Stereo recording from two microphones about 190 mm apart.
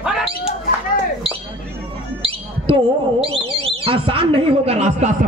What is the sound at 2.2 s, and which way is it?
Speech, 30° right (ahead or behind).